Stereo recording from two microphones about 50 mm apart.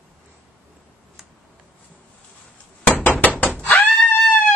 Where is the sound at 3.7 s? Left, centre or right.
Left.